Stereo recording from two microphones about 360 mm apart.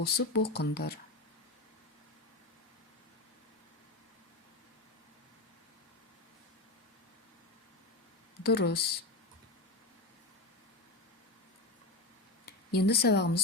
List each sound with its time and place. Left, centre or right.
0.0 s speech: left
8.4 s speech: left
12.5 s speech: left